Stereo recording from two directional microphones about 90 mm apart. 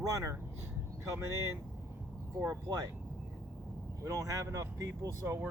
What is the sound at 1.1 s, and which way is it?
Speech, 30° right (ahead or behind).